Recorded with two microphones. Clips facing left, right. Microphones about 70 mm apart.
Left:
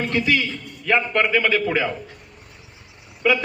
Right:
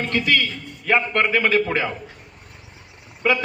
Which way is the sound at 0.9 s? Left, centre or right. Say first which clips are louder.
Even; centre.